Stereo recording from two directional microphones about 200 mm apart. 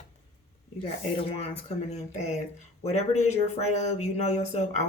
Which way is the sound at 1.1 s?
25° left (ahead or behind).